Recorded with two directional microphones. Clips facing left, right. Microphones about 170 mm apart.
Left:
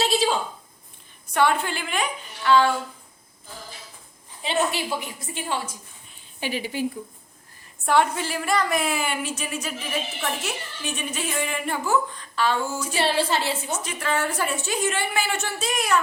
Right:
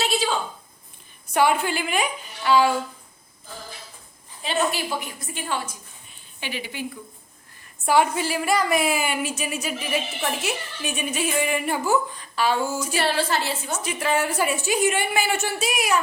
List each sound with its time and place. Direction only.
1.3 s a woman's voice: 5° right (ahead or behind)
4.4 s a woman's voice: 25° left (ahead or behind)
6.4 s speech: 40° left (ahead or behind)
7.9 s a woman's voice: 5° right (ahead or behind)
13.0 s a woman's voice: 25° left (ahead or behind)
14.2 s a woman's voice: 10° right (ahead or behind)